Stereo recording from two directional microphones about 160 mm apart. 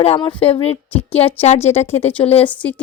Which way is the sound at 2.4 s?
10° left (ahead or behind).